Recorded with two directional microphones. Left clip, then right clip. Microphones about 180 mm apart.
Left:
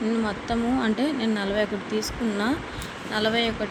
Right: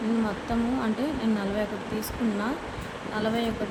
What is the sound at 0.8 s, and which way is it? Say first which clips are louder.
Speech: left 4 dB; 15° left (ahead or behind).